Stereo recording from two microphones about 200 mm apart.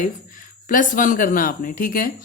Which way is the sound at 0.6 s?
40° left (ahead or behind).